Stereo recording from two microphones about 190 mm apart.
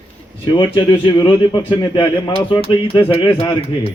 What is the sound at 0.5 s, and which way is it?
Speech, 25° left (ahead or behind).